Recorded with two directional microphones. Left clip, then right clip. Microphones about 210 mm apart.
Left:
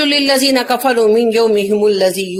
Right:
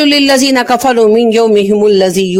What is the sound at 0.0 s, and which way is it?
Speech, 45° right (ahead or behind).